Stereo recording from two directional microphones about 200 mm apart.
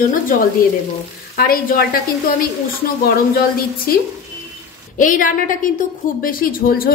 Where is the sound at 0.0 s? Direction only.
45° left (ahead or behind).